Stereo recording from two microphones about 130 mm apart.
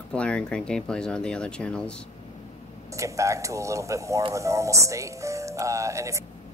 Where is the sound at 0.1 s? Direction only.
10° left (ahead or behind).